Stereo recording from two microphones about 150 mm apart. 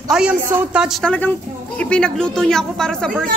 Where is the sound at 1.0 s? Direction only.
10° left (ahead or behind).